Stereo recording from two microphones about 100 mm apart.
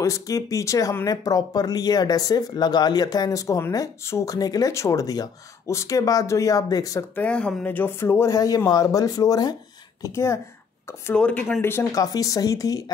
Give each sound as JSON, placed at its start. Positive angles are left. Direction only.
{"t": 0.0, "sound": "speech", "side_deg": 30}
{"t": 7.2, "sound": "speech", "side_deg": 10}
{"t": 8.4, "sound": "speech", "side_deg": 40}
{"t": 11.1, "sound": "speech", "side_deg": 15}
{"t": 11.9, "sound": "speech", "side_deg": 35}